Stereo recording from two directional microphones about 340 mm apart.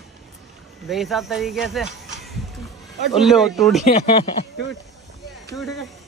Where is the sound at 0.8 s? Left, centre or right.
Centre.